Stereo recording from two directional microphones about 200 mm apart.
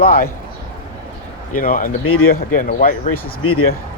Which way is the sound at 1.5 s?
45° left (ahead or behind).